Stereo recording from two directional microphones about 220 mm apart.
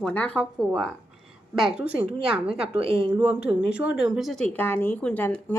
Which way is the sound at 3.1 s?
5° right (ahead or behind).